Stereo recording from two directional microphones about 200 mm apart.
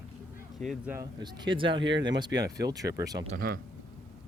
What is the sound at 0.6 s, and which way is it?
Speech, centre (ahead or behind).